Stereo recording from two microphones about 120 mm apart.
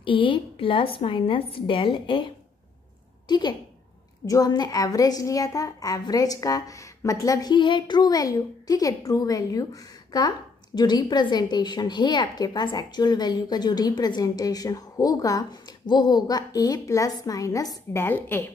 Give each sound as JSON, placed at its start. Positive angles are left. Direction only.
{"t": 0.0, "sound": "a woman's voice", "side_deg": 45}